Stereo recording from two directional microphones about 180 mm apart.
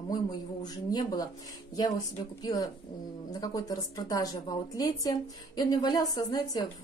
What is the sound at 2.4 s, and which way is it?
Speech, 20° left (ahead or behind).